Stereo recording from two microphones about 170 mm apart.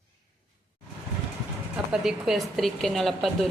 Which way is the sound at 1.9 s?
5° right (ahead or behind).